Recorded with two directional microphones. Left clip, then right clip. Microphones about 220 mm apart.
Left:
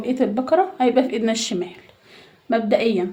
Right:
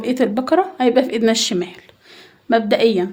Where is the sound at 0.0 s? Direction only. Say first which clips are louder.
Right 3 dB; 45° right (ahead or behind).